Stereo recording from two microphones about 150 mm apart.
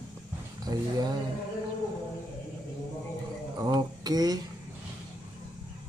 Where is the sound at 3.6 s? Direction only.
25° right (ahead or behind).